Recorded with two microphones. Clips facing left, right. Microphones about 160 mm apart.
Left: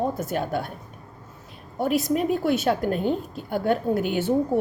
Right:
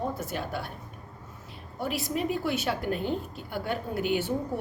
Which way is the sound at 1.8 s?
50° left (ahead or behind).